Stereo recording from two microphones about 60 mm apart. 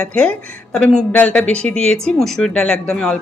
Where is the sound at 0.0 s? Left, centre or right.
Centre.